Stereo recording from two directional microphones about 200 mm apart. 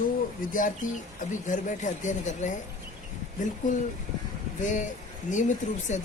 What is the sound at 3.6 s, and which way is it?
Speech, 40° left (ahead or behind).